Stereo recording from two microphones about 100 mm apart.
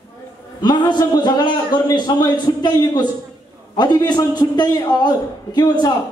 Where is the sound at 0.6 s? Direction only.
45° left (ahead or behind).